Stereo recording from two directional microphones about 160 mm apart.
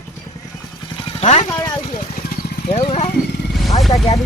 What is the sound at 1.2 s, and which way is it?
Speech, 45° left (ahead or behind).